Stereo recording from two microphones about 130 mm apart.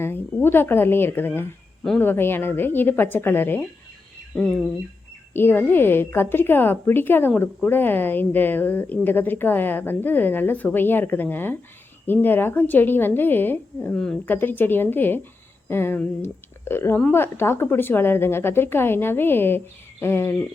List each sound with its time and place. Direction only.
0.0 s a woman's voice: 15° left (ahead or behind)
5.3 s a woman's voice: 15° left (ahead or behind)